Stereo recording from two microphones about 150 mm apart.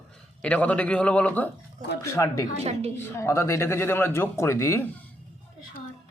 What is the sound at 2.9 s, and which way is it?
A man's voice, 20° left (ahead or behind).